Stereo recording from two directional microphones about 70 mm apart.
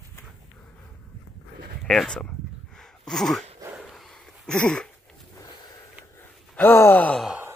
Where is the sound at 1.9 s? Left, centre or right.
Centre.